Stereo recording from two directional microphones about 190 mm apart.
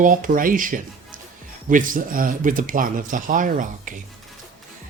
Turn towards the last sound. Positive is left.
turn(degrees=-45)  # may be behind; listen again after turning